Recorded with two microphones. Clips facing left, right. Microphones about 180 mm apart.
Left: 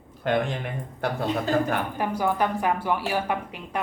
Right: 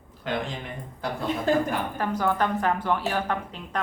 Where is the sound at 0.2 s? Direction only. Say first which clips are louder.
Left 5 dB; 55° left (ahead or behind).